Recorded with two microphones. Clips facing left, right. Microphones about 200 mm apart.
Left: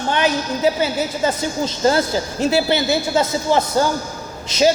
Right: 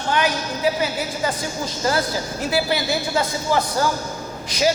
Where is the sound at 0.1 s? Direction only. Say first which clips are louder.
Left 2 dB; 25° left (ahead or behind).